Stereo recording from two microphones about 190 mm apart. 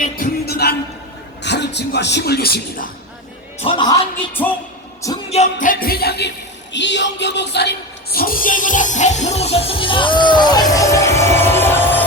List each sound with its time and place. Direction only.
0.2 s speech: 55° left (ahead or behind)
3.6 s a man's voice: 25° left (ahead or behind)
5.3 s music: 40° left (ahead or behind); by 6.3 s 60° left (ahead or behind)
6.7 s music: 70° left (ahead or behind)
8.1 s music: 50° left (ahead or behind); by 12.0 s 10° left (ahead or behind)